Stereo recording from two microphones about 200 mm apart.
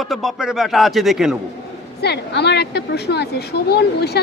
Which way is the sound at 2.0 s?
55° left (ahead or behind).